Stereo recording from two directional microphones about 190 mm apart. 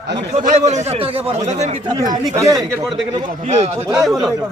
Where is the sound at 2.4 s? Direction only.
20° right (ahead or behind).